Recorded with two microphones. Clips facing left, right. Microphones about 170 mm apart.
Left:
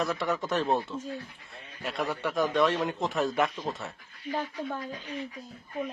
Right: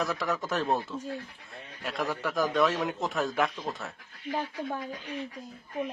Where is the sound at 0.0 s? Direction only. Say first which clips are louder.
Left 1 dB; centre (ahead or behind).